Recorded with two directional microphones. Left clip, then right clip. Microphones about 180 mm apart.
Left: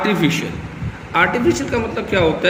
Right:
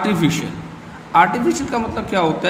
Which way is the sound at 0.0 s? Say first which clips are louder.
Left 1 dB; 60° right (ahead or behind).